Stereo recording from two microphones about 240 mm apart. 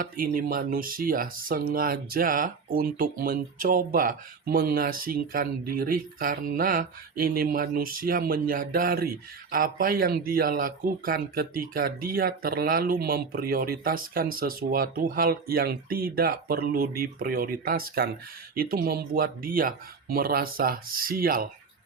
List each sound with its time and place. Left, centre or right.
0.0 s speech: right